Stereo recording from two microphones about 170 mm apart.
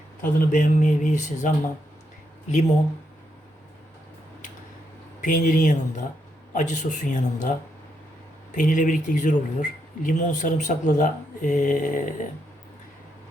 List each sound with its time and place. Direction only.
0.2 s speech: 50° left (ahead or behind)
5.2 s speech: 50° left (ahead or behind)
8.5 s speech: 45° left (ahead or behind)